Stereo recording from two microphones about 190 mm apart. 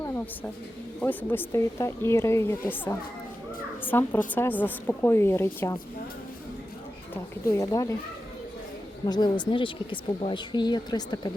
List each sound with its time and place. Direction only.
0.9 s a woman's voice: 10° left (ahead or behind)
7.1 s a woman's voice: 15° left (ahead or behind)
9.0 s speech: 20° left (ahead or behind)